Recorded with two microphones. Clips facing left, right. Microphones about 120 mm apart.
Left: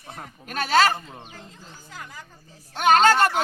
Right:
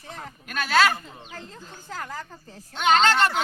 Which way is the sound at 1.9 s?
90° right.